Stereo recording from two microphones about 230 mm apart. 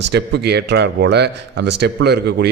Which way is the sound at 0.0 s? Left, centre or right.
Right.